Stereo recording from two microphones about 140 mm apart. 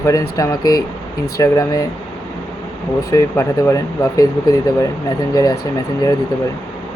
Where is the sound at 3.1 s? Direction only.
20° left (ahead or behind).